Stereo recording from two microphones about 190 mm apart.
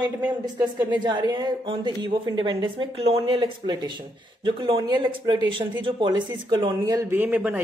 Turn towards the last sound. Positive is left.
turn(degrees=-10)  # may be behind; listen again after turning